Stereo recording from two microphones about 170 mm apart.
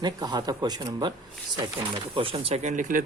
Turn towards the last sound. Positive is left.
turn(degrees=-50)  # may be behind; listen again after turning